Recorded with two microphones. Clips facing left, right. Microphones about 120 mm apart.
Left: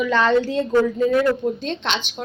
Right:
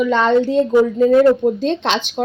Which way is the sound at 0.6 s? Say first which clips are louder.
Right 5 dB; 20° right (ahead or behind).